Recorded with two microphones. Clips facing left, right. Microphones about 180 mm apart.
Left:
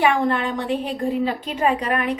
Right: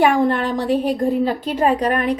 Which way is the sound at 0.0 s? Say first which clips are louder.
Right 3 dB; 40° right (ahead or behind).